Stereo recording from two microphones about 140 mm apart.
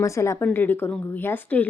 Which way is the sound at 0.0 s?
20° left (ahead or behind).